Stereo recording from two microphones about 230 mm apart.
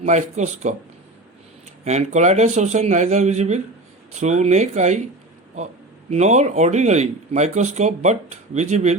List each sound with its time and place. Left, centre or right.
0.0 s a man's voice: right
1.8 s a man's voice: right
6.1 s speech: right